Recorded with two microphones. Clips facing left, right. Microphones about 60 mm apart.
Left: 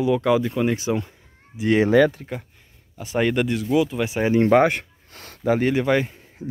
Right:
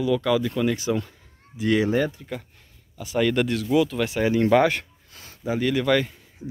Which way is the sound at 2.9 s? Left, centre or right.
Left.